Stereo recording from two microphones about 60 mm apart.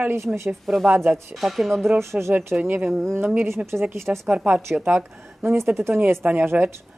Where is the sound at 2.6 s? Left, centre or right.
Right.